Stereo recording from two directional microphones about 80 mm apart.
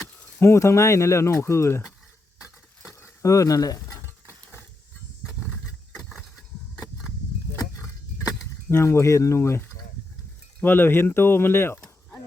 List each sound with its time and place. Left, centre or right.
0.3 s speech: left
3.0 s speech: left
6.0 s vehicle: centre
8.7 s speech: left